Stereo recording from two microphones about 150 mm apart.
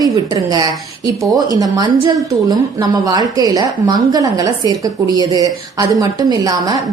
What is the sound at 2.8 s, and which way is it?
A woman's voice, 25° right (ahead or behind).